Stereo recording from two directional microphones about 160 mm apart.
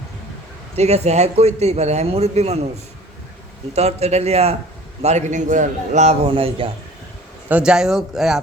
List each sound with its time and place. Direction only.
0.8 s a man's voice: 45° right (ahead or behind)
3.8 s a man's voice: 40° right (ahead or behind)
7.4 s speech: 5° right (ahead or behind)